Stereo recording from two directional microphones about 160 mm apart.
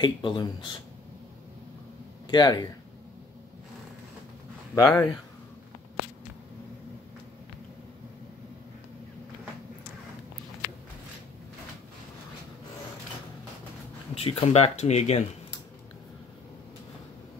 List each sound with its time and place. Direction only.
0.0 s speech: 30° left (ahead or behind)
2.3 s speech: 25° left (ahead or behind)
4.7 s speech: 20° left (ahead or behind)
14.1 s speech: 40° left (ahead or behind)